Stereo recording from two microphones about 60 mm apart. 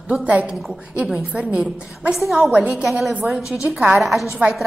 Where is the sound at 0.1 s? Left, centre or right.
Centre.